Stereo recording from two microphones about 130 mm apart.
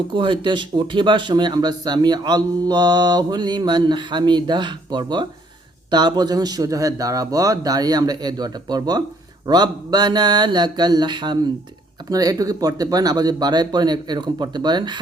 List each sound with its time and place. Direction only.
0.1 s a man's voice: 40° right (ahead or behind)